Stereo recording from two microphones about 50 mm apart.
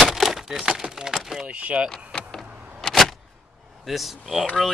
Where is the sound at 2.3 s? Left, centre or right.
Centre.